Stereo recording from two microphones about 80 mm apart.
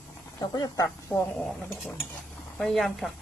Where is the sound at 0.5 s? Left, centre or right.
Left.